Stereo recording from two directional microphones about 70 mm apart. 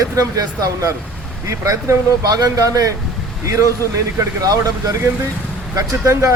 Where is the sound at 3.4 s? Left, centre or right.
Right.